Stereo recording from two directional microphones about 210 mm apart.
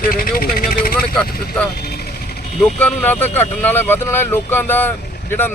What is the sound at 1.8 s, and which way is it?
Vehicle, 50° left (ahead or behind).